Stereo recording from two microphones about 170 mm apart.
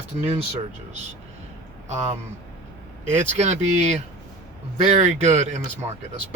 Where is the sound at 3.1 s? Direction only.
40° right (ahead or behind).